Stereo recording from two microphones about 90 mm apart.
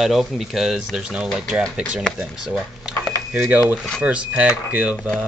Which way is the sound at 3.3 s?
20° right (ahead or behind).